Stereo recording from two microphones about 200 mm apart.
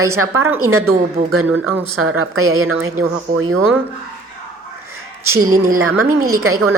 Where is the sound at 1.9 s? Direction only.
90° right.